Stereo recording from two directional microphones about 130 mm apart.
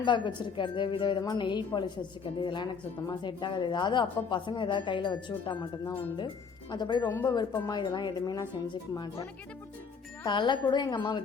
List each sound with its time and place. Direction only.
0.0 s a woman's voice: 35° left (ahead or behind)
10.2 s a woman's voice: 35° left (ahead or behind)